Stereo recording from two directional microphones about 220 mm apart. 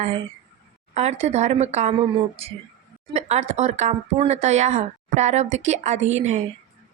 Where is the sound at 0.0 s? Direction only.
25° right (ahead or behind).